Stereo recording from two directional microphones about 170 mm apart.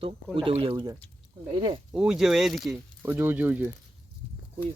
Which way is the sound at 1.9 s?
5° right (ahead or behind).